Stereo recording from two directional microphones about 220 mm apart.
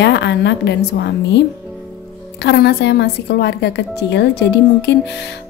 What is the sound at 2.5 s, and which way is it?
A woman's voice, 50° left (ahead or behind).